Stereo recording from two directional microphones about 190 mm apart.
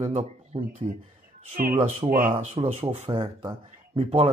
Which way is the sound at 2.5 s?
35° right (ahead or behind).